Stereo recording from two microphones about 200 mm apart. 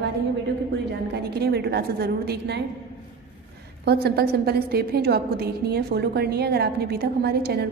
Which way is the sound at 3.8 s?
55° right (ahead or behind).